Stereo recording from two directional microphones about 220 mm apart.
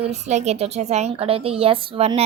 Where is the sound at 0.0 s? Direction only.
30° right (ahead or behind).